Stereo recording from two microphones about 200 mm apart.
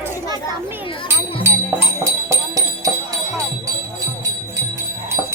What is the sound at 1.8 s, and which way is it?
Music, 15° right (ahead or behind).